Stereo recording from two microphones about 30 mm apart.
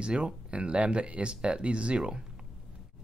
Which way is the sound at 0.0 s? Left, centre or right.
Right.